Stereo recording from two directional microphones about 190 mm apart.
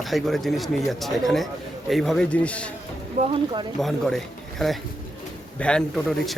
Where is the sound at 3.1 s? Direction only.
35° right (ahead or behind).